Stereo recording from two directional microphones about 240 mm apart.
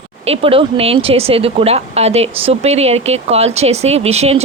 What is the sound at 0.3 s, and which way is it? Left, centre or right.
Speech, right.